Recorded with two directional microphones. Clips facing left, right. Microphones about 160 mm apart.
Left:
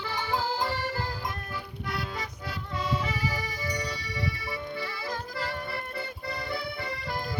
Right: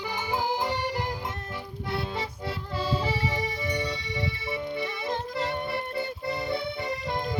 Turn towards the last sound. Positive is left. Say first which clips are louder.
# right 4 dB
turn(degrees=-20)  # may be behind; listen again after turning